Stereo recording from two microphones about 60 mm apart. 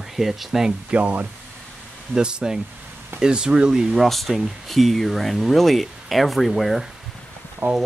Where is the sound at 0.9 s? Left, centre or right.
Right.